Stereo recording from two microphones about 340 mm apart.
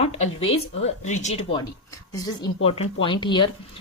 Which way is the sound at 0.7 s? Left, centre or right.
Centre.